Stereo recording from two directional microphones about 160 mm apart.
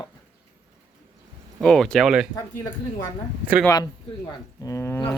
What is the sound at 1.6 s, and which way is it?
Speech, 5° left (ahead or behind).